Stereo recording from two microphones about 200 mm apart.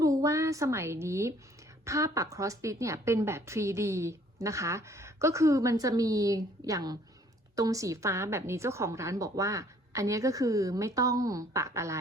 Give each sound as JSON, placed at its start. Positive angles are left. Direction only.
{"t": 0.0, "sound": "a woman's voice", "side_deg": -15}